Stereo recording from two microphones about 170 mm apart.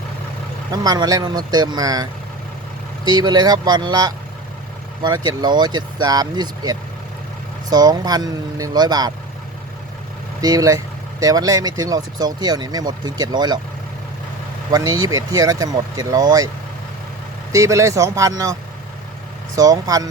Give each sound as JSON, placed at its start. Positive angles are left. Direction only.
{"t": 0.7, "sound": "speech", "side_deg": -25}
{"t": 10.4, "sound": "speech", "side_deg": -20}
{"t": 14.7, "sound": "speech", "side_deg": -20}
{"t": 17.5, "sound": "speech", "side_deg": -20}
{"t": 19.5, "sound": "speech", "side_deg": -20}